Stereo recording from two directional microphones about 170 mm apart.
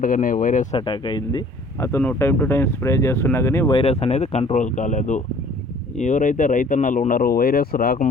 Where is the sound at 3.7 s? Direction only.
35° left (ahead or behind).